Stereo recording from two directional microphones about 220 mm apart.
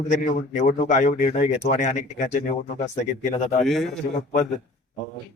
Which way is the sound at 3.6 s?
Centre (ahead or behind).